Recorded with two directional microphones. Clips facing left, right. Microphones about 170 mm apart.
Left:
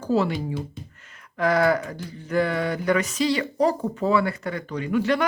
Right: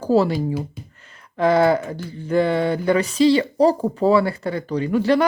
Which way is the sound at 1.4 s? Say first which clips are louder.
Right 4 dB; 25° right (ahead or behind).